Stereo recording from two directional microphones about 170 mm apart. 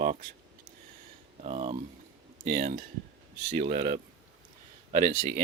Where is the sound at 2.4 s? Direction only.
55° right (ahead or behind).